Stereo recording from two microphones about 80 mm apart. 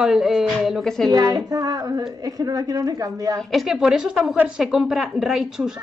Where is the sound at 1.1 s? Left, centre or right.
Right.